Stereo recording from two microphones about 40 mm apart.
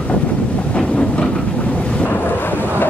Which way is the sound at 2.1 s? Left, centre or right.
Left.